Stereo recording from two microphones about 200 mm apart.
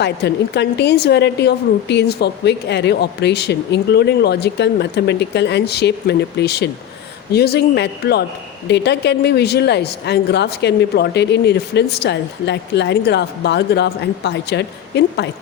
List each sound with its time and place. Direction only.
0.0 s speech: 60° left (ahead or behind)